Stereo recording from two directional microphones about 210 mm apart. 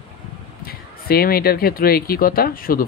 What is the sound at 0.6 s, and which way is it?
Speech, 45° left (ahead or behind).